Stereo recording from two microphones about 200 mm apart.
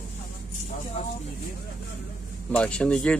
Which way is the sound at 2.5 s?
5° left (ahead or behind).